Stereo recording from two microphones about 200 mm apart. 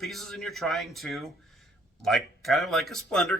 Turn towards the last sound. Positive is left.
turn(degrees=0)  # may be behind; listen again after turning